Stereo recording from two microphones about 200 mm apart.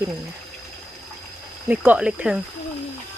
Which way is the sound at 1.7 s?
5° right (ahead or behind).